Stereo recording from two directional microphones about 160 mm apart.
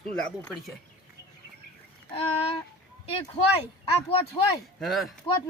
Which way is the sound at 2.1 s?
40° left (ahead or behind).